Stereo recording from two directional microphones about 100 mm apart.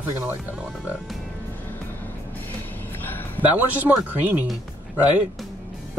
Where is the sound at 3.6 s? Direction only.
15° right (ahead or behind).